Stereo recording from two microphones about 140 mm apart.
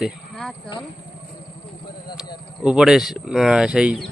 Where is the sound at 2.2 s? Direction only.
5° right (ahead or behind).